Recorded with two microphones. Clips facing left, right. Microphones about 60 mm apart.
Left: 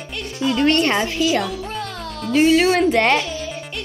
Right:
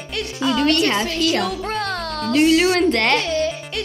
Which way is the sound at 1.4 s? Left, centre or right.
Right.